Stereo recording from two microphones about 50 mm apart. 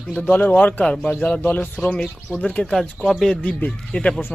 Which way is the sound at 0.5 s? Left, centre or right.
Left.